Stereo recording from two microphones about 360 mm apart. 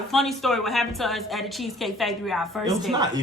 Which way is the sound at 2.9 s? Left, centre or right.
Centre.